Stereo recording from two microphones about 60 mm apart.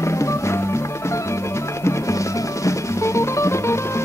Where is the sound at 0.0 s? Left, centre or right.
Left.